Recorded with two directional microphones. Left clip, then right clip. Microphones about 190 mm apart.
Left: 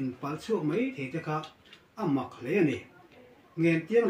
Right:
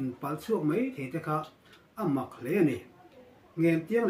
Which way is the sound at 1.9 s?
20° right (ahead or behind).